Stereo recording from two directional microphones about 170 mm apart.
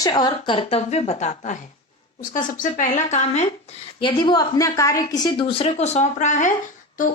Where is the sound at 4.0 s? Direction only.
30° left (ahead or behind); by 6.5 s 45° left (ahead or behind).